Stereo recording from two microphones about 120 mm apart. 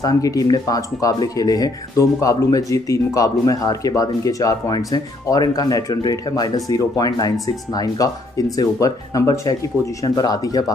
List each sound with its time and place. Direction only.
0.0 s speech: 30° left (ahead or behind)